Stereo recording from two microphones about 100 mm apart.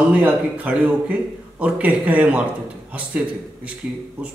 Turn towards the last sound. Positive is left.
turn(degrees=-5)  # may be behind; listen again after turning